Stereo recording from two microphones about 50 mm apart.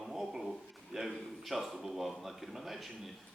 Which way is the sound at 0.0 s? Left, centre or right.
Centre.